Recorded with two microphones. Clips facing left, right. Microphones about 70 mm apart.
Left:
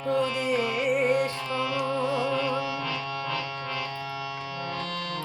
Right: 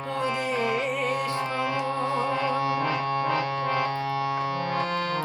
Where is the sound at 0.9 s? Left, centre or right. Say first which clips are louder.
Left 4 dB; left.